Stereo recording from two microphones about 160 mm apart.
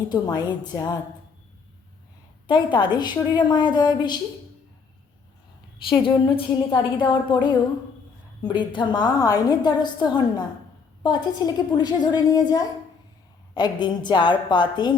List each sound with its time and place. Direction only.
0.1 s a woman's voice: 25° left (ahead or behind)
2.5 s a woman's voice: 30° left (ahead or behind)
6.0 s a woman's voice: 30° left (ahead or behind)
8.4 s a woman's voice: 30° left (ahead or behind)